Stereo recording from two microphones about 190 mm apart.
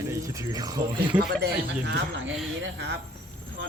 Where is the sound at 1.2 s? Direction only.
55° right (ahead or behind).